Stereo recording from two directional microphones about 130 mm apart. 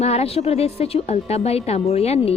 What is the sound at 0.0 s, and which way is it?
A woman's voice, 55° left (ahead or behind).